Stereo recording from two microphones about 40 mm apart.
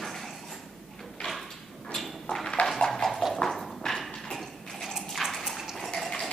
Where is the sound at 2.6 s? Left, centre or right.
Centre.